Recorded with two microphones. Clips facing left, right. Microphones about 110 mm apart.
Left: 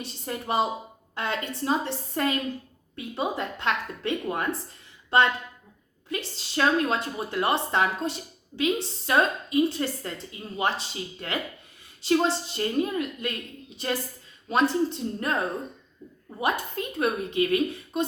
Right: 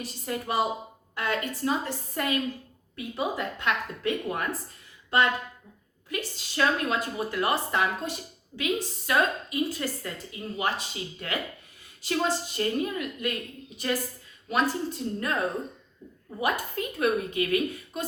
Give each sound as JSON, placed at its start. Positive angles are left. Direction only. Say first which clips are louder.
{"t": 0.0, "sound": "speech", "louder": "right 1 dB", "side_deg": 25}
{"t": 6.1, "sound": "speech", "louder": "left 1 dB", "side_deg": 30}
{"t": 16.4, "sound": "speech", "louder": "left 1 dB", "side_deg": 30}